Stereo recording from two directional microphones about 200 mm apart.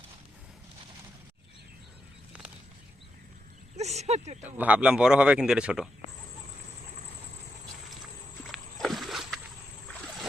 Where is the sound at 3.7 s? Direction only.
35° right (ahead or behind).